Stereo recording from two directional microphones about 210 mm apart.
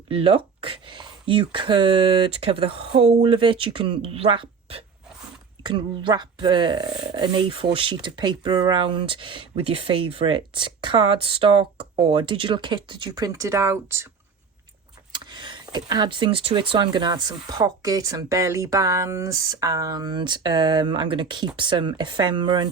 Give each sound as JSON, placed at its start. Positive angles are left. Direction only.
{"t": 0.1, "sound": "speech", "side_deg": -25}
{"t": 15.1, "sound": "speech", "side_deg": -20}